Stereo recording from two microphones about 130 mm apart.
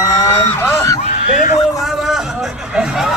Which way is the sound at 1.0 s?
60° left (ahead or behind).